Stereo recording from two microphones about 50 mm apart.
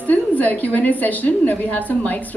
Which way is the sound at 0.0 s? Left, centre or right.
Left.